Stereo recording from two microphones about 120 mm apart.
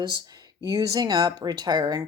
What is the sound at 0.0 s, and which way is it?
Speech, 35° right (ahead or behind).